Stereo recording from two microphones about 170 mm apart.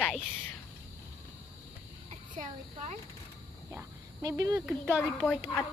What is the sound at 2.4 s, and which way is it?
Speech, 45° right (ahead or behind).